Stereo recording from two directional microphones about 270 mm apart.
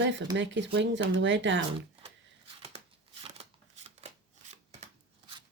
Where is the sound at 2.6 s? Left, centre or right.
Right.